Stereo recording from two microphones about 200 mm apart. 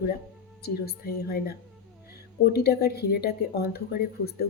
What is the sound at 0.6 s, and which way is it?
Speech, 50° left (ahead or behind).